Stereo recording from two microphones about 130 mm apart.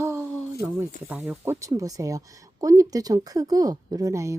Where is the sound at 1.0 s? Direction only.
15° right (ahead or behind).